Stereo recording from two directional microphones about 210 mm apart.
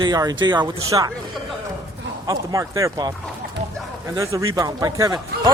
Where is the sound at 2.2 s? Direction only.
15° right (ahead or behind).